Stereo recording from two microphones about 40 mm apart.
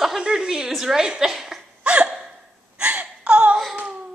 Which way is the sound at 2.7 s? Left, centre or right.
Right.